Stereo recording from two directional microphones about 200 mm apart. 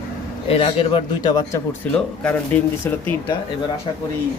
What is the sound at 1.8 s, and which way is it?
Speech, 5° left (ahead or behind).